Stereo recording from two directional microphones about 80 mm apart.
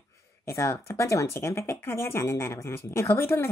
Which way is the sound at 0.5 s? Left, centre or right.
Left.